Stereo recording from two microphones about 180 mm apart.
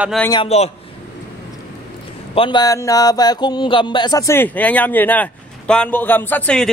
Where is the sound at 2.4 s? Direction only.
25° left (ahead or behind).